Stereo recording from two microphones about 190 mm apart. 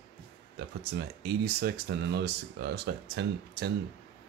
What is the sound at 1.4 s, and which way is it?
Speech, 55° right (ahead or behind).